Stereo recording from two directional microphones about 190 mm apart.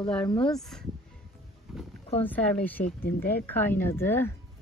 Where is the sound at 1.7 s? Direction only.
Centre (ahead or behind).